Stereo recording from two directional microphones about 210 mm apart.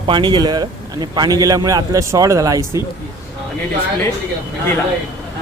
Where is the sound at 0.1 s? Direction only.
20° right (ahead or behind).